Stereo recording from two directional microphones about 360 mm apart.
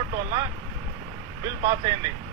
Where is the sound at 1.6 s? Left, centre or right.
Centre.